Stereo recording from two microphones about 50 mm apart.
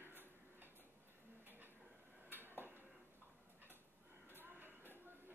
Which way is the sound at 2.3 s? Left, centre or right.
Right.